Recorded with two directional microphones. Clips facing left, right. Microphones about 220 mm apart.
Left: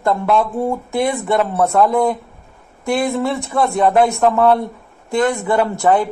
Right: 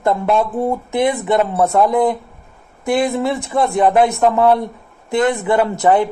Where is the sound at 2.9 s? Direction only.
20° right (ahead or behind).